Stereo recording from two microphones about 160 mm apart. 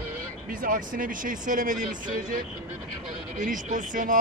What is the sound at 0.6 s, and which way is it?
Speech, 60° right (ahead or behind).